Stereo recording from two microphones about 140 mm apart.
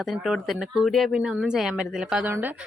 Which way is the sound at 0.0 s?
Centre (ahead or behind).